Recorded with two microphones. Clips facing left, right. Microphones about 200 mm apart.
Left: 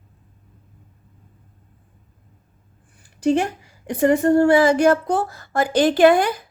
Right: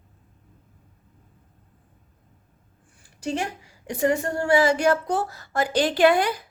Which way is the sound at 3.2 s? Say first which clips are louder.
Left 9 dB; 55° left (ahead or behind).